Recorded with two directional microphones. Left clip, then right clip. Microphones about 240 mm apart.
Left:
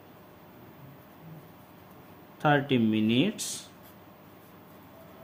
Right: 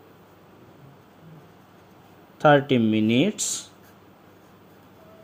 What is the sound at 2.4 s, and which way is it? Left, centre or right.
Speech, right.